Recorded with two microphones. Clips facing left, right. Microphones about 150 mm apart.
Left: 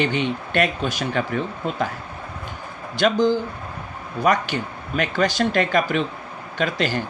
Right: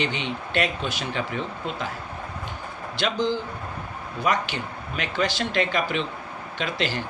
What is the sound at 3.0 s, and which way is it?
Speech, 45° left (ahead or behind).